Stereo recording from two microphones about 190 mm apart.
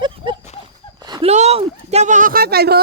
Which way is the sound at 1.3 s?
35° right (ahead or behind).